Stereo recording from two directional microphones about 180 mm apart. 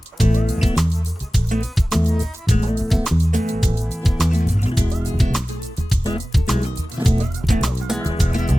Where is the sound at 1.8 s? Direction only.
Centre (ahead or behind).